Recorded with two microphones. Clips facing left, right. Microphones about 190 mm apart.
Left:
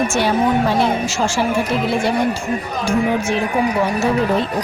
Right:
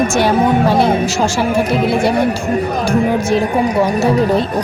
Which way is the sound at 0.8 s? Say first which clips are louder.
Right 4 dB; 35° right (ahead or behind).